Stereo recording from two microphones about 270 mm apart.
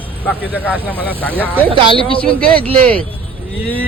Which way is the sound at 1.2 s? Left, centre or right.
Centre.